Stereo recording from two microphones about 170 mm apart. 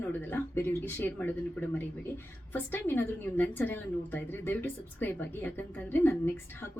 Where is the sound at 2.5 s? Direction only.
10° left (ahead or behind).